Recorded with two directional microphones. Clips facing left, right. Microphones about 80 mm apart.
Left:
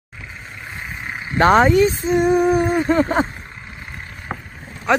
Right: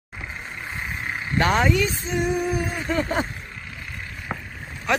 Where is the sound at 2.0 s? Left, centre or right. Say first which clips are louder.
Left 8 dB; left.